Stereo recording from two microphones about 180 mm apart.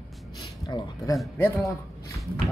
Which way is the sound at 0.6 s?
20° left (ahead or behind).